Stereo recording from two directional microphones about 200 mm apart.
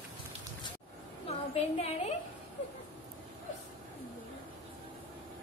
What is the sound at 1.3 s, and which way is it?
Speech, 30° left (ahead or behind).